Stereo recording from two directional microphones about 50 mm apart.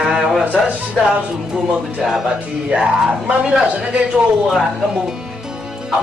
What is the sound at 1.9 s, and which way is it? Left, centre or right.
A man's voice, centre.